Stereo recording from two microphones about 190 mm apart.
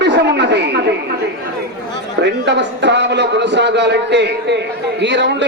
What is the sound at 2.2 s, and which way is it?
A man's voice, 65° right (ahead or behind).